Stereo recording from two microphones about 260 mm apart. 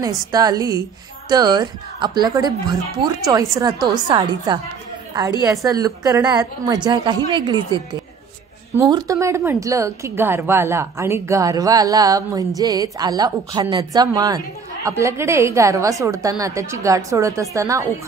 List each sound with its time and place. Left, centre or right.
0.0 s speech: centre